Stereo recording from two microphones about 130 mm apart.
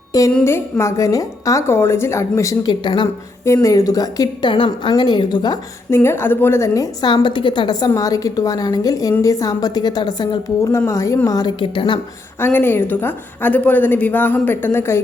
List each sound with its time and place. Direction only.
0.4 s a woman's voice: 20° left (ahead or behind)
2.8 s a woman's voice: 35° left (ahead or behind)
3.4 s a woman's voice: 20° left (ahead or behind)
5.9 s a woman's voice: 20° left (ahead or behind)
10.7 s a woman's voice: 20° left (ahead or behind)
11.6 s a woman's voice: 40° left (ahead or behind)
12.4 s a woman's voice: 15° left (ahead or behind)